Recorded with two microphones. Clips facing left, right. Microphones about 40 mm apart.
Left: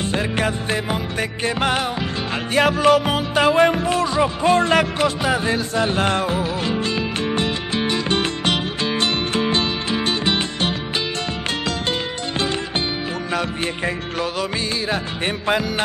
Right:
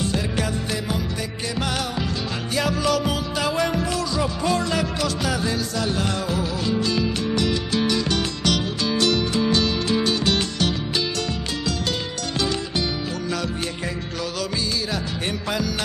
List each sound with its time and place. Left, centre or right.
0.1 s music: left
2.5 s speech: left
9.0 s music: left
13.3 s music: left